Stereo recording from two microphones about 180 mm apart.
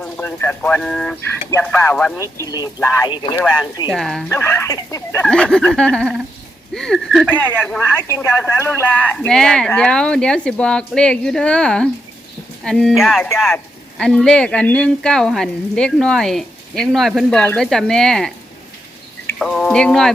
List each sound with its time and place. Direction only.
0.0 s speech: 10° left (ahead or behind)
2.4 s speech: 20° left (ahead or behind)
3.3 s speech: 10° left (ahead or behind)
4.3 s speech: 15° left (ahead or behind)
5.2 s speech: 5° left (ahead or behind)
19.4 s speech: 5° left (ahead or behind)